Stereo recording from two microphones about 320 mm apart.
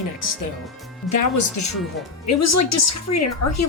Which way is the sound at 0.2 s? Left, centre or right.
Left.